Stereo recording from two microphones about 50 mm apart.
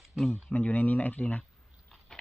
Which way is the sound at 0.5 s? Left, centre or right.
Left.